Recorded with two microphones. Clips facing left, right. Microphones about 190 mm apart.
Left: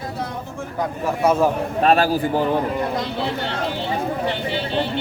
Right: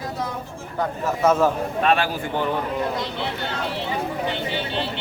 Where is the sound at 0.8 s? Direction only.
10° left (ahead or behind).